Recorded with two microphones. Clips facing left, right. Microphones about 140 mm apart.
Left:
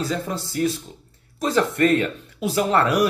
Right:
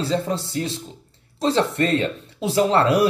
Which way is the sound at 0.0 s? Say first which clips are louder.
Right 3 dB; 30° right (ahead or behind).